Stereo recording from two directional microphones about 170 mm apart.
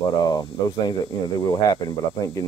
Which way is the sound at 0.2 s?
25° left (ahead or behind).